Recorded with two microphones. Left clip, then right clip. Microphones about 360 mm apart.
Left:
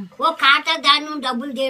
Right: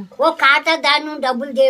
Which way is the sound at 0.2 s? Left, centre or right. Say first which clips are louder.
Right 2 dB; centre.